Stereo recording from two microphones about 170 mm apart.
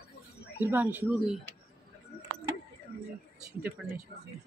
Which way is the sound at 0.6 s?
10° right (ahead or behind).